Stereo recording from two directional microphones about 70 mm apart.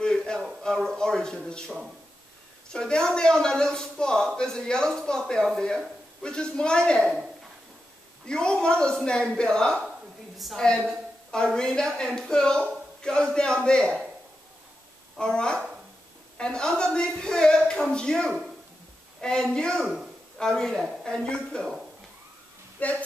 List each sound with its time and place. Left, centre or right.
0.0 s a sound: centre
0.7 s speech: centre
2.7 s speech: centre
8.3 s speech: centre
10.3 s a woman's voice: centre
10.9 s a woman's voice: centre
15.1 s speech: centre
22.8 s speech: left